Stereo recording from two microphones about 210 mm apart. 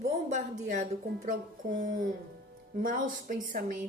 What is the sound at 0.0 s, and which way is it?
A woman's voice, 35° right (ahead or behind).